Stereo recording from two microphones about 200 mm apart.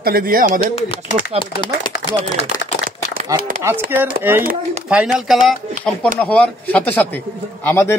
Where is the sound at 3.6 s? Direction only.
10° right (ahead or behind); by 8.0 s 10° left (ahead or behind).